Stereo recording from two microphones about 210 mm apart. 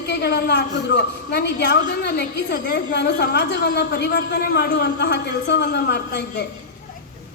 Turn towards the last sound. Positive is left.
turn(degrees=55)  # may be behind; listen again after turning